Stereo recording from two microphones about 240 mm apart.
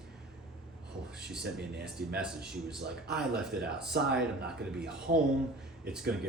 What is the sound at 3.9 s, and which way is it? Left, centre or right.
Speech, right.